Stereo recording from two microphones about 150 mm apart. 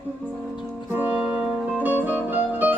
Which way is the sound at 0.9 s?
10° right (ahead or behind).